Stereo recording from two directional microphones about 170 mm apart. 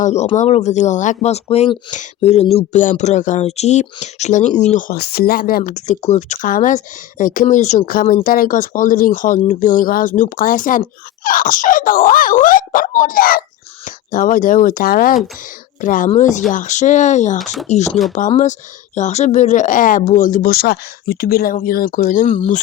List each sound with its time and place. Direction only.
0.0 s speech: 40° left (ahead or behind); by 5.7 s 55° left (ahead or behind)
5.9 s speech: 40° left (ahead or behind)
18.9 s speech: 45° left (ahead or behind)